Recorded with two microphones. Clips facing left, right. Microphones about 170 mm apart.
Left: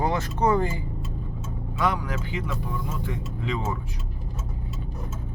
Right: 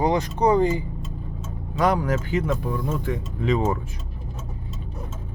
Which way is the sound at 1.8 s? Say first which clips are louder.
Right 6 dB; 40° right (ahead or behind).